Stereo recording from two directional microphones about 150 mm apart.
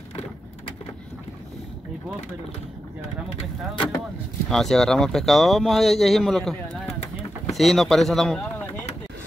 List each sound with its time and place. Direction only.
3.3 s speech: 35° left (ahead or behind)
4.5 s speech: 5° left (ahead or behind)